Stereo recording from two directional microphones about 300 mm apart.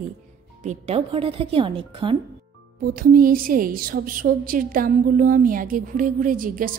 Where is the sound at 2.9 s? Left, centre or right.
Right.